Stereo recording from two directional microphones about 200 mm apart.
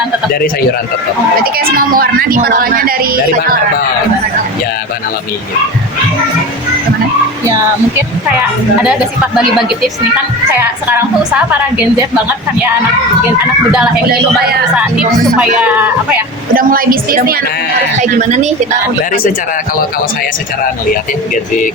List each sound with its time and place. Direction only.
1.5 s speech: 45° right (ahead or behind)
8.8 s a woman's voice: 5° right (ahead or behind)
14.1 s speech: 50° right (ahead or behind)
14.8 s a woman's voice: 5° right (ahead or behind)
16.6 s speech: 45° right (ahead or behind)
18.0 s speech: 35° right (ahead or behind)